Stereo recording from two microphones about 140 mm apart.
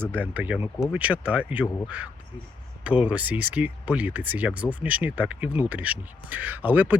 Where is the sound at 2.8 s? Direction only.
10° right (ahead or behind).